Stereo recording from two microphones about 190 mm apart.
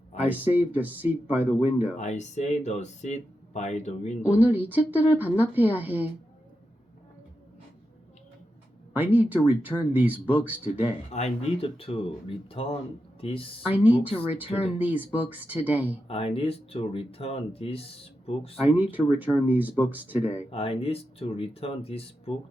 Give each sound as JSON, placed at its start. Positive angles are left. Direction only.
{"t": 0.3, "sound": "speech", "side_deg": -10}
{"t": 2.0, "sound": "speech", "side_deg": 35}
{"t": 4.3, "sound": "speech", "side_deg": -10}
{"t": 8.9, "sound": "speech", "side_deg": -10}
{"t": 11.1, "sound": "speech", "side_deg": 35}
{"t": 13.7, "sound": "speech", "side_deg": -10}
{"t": 16.0, "sound": "speech", "side_deg": 30}
{"t": 18.6, "sound": "speech", "side_deg": -10}
{"t": 20.5, "sound": "speech", "side_deg": 30}